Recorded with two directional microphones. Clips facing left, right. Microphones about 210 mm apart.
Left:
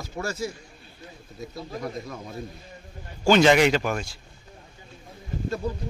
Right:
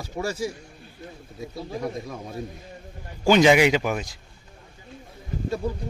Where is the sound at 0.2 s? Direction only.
10° right (ahead or behind).